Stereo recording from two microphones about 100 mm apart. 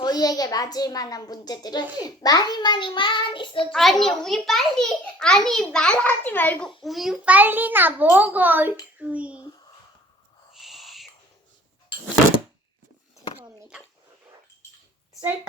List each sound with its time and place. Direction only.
0.0 s a child's voice: 40° left (ahead or behind)
3.6 s a child's voice: 5° left (ahead or behind); by 6.7 s 20° left (ahead or behind)
6.8 s a child's voice: centre (ahead or behind)
7.3 s a child's voice: 15° right (ahead or behind)
10.5 s owl: centre (ahead or behind)